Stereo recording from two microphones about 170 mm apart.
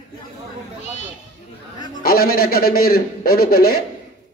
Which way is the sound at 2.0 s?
60° left (ahead or behind).